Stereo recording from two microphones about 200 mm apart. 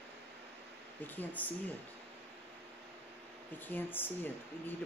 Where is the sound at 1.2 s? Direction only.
10° left (ahead or behind).